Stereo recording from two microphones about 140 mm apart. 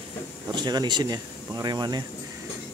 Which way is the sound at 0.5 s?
30° right (ahead or behind).